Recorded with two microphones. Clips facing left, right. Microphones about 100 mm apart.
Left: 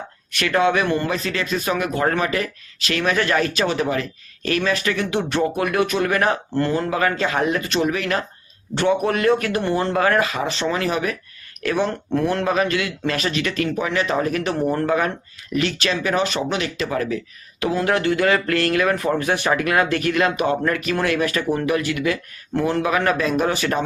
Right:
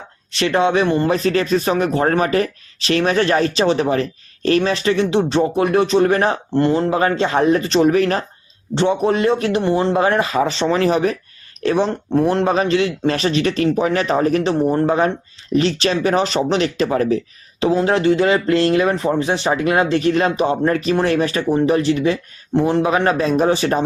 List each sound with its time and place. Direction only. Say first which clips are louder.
0.3 s speech: right 2 dB; 25° right (ahead or behind)
1.1 s speech: right 7 dB; 35° right (ahead or behind)
8.7 s speech: right 3 dB; 25° right (ahead or behind)
14.4 s speech: right 4 dB; 25° right (ahead or behind)